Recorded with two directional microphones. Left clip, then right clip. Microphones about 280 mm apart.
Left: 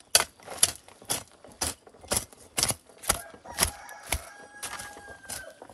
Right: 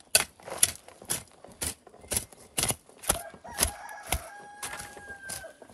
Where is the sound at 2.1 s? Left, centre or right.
Centre.